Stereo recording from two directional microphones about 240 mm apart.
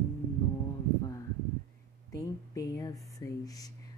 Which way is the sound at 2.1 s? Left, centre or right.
Centre.